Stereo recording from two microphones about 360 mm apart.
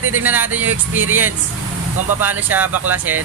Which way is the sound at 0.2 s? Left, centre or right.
Centre.